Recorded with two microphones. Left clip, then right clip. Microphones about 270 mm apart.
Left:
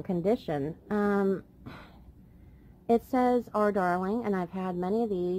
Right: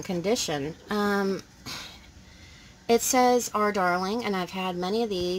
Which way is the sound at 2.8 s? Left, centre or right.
Centre.